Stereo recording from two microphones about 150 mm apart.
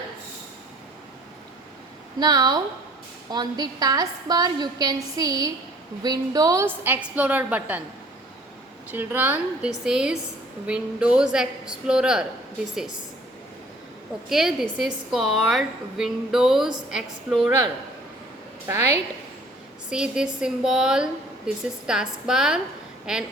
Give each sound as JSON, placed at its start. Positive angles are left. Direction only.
{"t": 2.1, "sound": "a woman's voice", "side_deg": -25}
{"t": 8.9, "sound": "a woman's voice", "side_deg": -10}
{"t": 14.3, "sound": "a woman's voice", "side_deg": 0}
{"t": 19.9, "sound": "a woman's voice", "side_deg": -5}